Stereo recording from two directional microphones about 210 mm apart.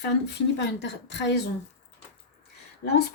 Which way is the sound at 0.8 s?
55° left (ahead or behind).